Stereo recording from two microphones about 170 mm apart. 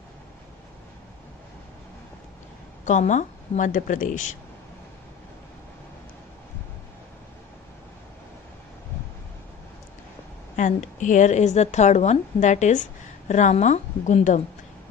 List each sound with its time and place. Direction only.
2.8 s a woman's voice: 45° left (ahead or behind)
10.6 s a woman's voice: 45° left (ahead or behind)